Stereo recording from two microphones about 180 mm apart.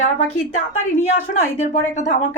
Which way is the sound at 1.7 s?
40° left (ahead or behind).